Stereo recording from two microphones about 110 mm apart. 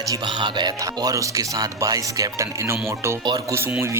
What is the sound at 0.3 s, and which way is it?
Speech, 45° right (ahead or behind).